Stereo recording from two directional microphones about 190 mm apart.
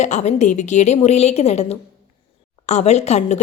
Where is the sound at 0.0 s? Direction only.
35° left (ahead or behind).